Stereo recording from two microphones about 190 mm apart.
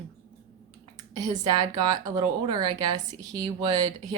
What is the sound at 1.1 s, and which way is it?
Speech, 20° right (ahead or behind).